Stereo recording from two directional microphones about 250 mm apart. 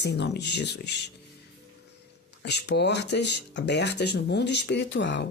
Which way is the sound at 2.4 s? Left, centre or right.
Left.